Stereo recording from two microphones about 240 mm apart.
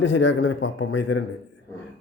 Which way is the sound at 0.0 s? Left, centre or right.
Left.